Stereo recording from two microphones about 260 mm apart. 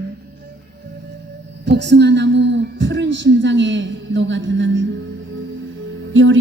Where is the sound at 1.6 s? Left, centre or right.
Right.